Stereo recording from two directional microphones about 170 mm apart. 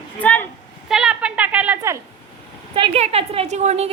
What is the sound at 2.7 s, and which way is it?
A woman's voice, 30° right (ahead or behind).